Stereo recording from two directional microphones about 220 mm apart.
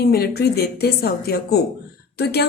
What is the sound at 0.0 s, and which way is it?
A woman's voice, 45° left (ahead or behind).